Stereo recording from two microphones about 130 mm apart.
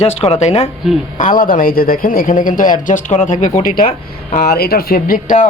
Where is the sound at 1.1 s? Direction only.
85° left.